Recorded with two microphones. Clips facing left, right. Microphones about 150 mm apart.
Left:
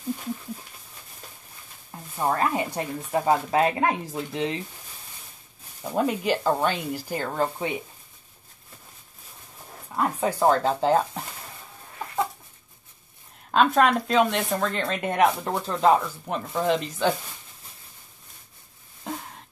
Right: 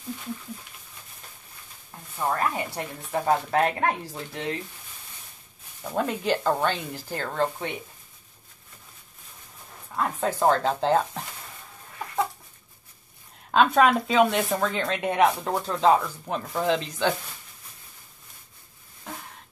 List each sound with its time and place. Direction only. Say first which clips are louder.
2.1 s speech: left 2 dB; 20° left (ahead or behind)
5.8 s speech: left 3 dB; 10° left (ahead or behind)
9.9 s speech: left 2 dB; 5° left (ahead or behind)
13.5 s speech: even; centre (ahead or behind)